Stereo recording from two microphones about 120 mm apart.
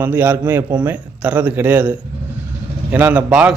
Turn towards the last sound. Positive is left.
turn(degrees=-10)  # may be behind; listen again after turning